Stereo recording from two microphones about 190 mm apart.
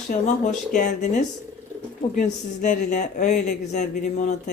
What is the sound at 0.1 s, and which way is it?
Speech, 40° left (ahead or behind).